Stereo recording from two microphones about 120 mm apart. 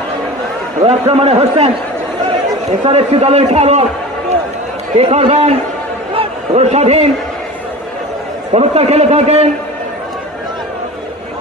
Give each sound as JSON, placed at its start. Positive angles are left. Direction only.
{"t": 0.8, "sound": "a man's voice", "side_deg": -60}
{"t": 2.9, "sound": "a man's voice", "side_deg": -60}
{"t": 4.9, "sound": "a man's voice", "side_deg": -55}
{"t": 6.1, "sound": "a sound", "side_deg": -65}
{"t": 8.5, "sound": "a man's voice", "side_deg": -60}